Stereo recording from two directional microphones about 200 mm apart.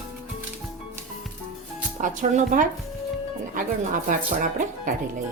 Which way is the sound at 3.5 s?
40° right (ahead or behind).